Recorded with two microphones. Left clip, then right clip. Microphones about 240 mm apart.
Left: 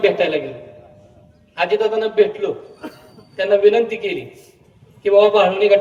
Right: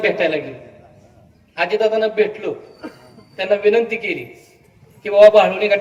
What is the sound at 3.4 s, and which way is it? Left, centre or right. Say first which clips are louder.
A man's voice: left 2 dB; left.